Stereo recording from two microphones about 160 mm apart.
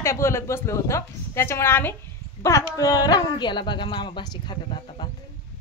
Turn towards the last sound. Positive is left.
turn(degrees=30)  # may be behind; listen again after turning